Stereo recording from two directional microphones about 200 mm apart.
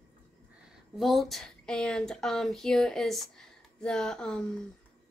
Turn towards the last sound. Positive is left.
turn(degrees=5)  # may be behind; listen again after turning